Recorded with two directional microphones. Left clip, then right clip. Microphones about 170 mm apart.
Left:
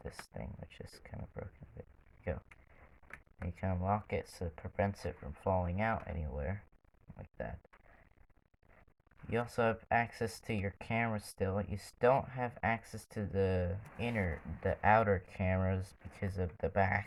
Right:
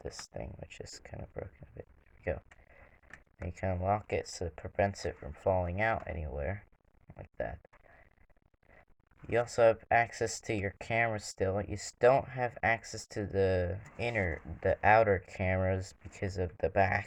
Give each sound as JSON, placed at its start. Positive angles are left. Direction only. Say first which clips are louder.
{"t": 0.3, "sound": "speech", "louder": "right 5 dB", "side_deg": -50}
{"t": 3.5, "sound": "speech", "louder": "right 4 dB", "side_deg": -50}
{"t": 9.3, "sound": "speech", "louder": "right 7 dB", "side_deg": -50}